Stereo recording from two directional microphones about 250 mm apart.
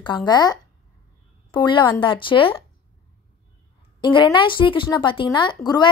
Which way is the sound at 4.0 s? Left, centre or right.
Centre.